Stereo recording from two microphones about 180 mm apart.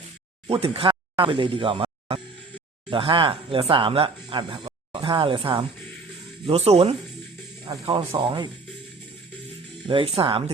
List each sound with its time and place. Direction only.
0.4 s speech: 35° right (ahead or behind)
9.8 s speech: 30° right (ahead or behind)